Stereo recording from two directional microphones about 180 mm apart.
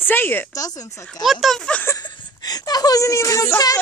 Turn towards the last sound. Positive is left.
turn(degrees=20)  # may be behind; listen again after turning